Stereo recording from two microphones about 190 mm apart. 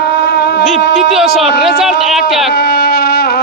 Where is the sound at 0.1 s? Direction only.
65° left (ahead or behind).